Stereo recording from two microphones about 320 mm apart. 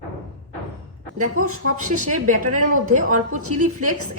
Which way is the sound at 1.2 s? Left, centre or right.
Right.